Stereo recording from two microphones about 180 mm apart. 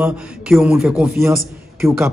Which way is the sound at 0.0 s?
5° right (ahead or behind).